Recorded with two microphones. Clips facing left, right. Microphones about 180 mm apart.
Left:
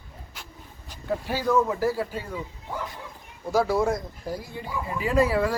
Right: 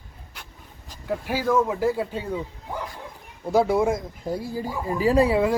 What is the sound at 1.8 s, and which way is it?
Speech, 20° right (ahead or behind).